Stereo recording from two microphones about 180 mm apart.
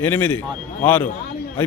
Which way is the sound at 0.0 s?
10° left (ahead or behind).